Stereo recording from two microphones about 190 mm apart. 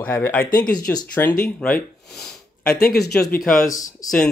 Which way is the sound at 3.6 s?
20° left (ahead or behind).